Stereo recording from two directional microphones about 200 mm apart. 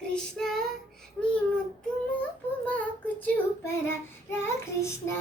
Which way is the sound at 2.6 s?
5° left (ahead or behind).